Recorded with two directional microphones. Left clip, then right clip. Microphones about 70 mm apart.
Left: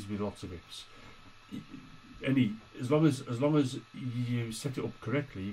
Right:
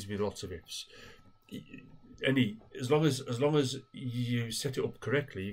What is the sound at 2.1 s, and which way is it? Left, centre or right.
A man's voice, right.